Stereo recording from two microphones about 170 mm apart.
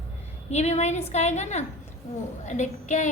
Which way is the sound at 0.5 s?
40° left (ahead or behind).